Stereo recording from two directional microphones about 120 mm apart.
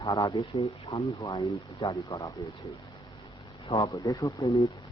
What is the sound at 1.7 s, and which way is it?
Speech, 25° left (ahead or behind).